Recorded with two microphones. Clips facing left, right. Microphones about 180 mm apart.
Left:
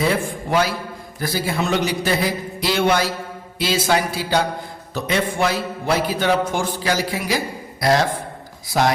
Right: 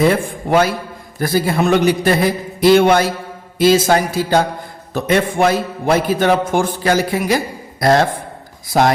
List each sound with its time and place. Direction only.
0.1 s a man's voice: 50° right (ahead or behind)